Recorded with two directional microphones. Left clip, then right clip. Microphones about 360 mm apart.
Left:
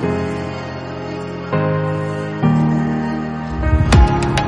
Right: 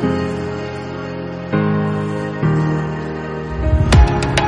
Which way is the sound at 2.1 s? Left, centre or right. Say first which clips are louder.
Even; centre.